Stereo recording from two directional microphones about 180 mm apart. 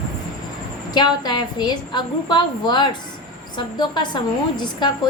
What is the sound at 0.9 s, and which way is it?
A woman's voice, 25° left (ahead or behind).